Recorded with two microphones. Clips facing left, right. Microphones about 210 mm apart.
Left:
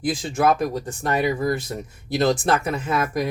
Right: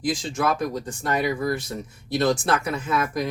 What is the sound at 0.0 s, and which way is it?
Speech, 55° left (ahead or behind).